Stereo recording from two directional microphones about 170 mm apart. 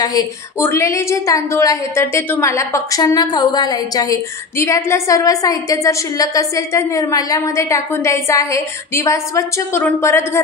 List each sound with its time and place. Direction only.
0.6 s a woman's voice: 15° left (ahead or behind)